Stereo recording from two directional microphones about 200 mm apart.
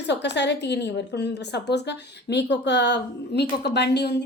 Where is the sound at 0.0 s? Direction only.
60° left (ahead or behind).